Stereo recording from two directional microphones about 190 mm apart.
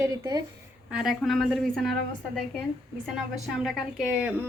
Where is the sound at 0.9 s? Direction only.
Centre (ahead or behind).